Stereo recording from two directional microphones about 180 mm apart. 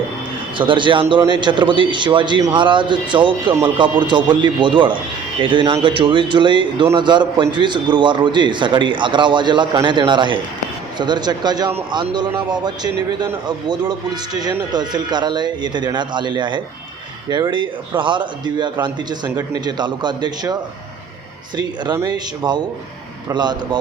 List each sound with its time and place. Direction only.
0.6 s speech: 25° right (ahead or behind)
14.7 s speech: 25° right (ahead or behind)
21.9 s speech: 20° right (ahead or behind)